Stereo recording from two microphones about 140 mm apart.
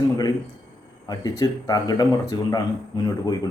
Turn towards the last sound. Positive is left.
turn(degrees=25)  # may be behind; listen again after turning